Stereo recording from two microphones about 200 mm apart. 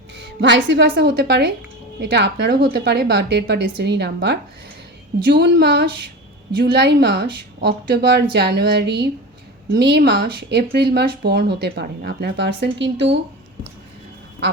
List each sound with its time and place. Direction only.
0.2 s speech: 60° right (ahead or behind)